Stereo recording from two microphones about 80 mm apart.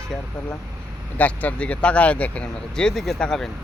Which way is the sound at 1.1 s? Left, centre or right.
Centre.